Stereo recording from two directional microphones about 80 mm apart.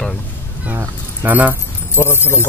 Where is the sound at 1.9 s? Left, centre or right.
Left.